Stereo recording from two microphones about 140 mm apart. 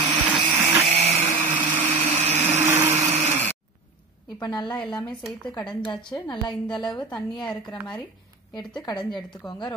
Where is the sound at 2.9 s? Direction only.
50° right (ahead or behind).